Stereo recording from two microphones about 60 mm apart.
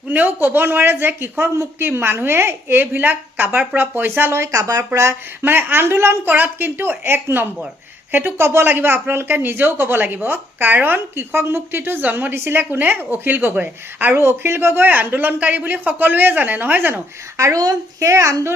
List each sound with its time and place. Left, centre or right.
0.1 s a woman's voice: right
5.4 s a woman's voice: right
6.3 s a woman's voice: right
14.8 s speech: right
17.3 s speech: right